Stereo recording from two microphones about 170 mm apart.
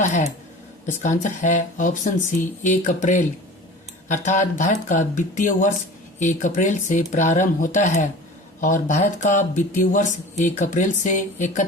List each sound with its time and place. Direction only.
0.0 s speech: 40° left (ahead or behind)